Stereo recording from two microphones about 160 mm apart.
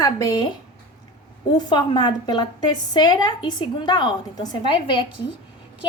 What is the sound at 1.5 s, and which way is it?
A woman's voice, 25° left (ahead or behind).